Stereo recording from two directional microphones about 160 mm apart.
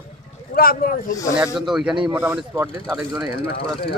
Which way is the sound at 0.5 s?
70° left (ahead or behind).